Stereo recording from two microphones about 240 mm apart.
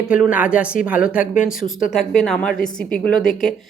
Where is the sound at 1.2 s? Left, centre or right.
Left.